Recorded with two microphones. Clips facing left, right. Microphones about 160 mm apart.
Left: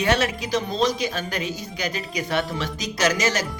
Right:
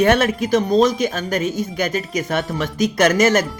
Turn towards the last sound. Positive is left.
turn(degrees=-50)  # may be behind; listen again after turning